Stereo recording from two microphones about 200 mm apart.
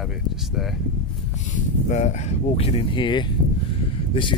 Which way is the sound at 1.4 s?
35° left (ahead or behind).